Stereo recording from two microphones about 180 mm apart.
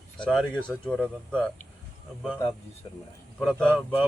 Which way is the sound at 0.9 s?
5° left (ahead or behind).